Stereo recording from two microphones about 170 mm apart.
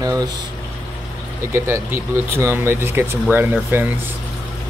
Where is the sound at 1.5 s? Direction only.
15° right (ahead or behind).